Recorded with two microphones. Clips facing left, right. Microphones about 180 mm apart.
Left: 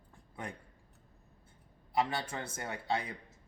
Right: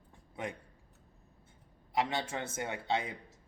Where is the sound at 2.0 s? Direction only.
20° right (ahead or behind).